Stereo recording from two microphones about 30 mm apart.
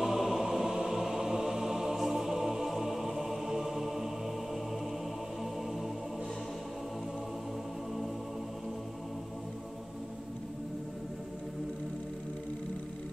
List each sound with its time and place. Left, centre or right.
0.0 s music: centre
0.4 s music: centre